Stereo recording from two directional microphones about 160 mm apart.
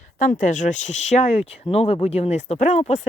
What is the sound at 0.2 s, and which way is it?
Speech, 50° left (ahead or behind).